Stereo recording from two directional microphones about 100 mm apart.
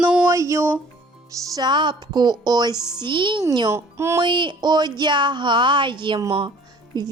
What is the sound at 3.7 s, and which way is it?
Speech, 30° right (ahead or behind).